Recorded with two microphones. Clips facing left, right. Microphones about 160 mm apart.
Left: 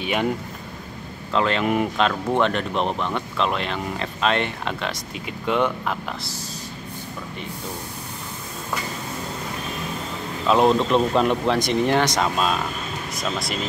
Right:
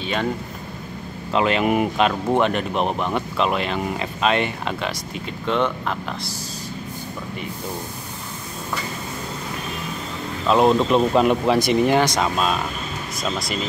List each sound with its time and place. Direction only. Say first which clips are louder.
0.0 s speech: left 1 dB; 15° left (ahead or behind)
1.3 s speech: right 2 dB; 15° right (ahead or behind); by 6.3 s 5° left (ahead or behind)
10.4 s speech: right 1 dB; centre (ahead or behind)